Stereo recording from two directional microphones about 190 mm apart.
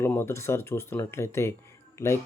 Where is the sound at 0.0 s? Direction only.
10° left (ahead or behind).